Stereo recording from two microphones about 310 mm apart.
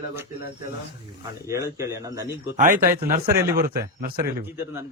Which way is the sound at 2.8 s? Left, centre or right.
Right.